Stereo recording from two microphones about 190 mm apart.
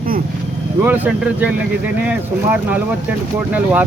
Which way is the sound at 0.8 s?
10° right (ahead or behind).